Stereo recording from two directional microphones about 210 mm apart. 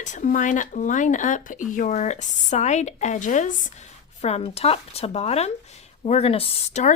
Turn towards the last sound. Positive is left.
turn(degrees=30)  # may be behind; listen again after turning